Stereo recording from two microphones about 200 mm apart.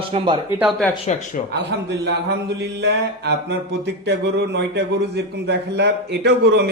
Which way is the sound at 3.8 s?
60° right (ahead or behind).